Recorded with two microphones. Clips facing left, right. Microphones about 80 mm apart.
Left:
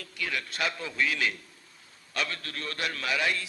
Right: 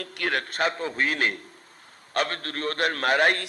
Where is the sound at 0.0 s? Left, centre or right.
Right.